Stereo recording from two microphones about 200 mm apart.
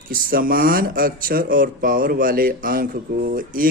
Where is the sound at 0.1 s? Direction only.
45° right (ahead or behind).